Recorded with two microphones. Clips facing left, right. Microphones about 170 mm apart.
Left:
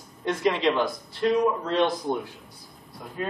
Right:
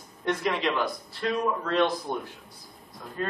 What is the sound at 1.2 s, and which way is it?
Speech, 20° left (ahead or behind).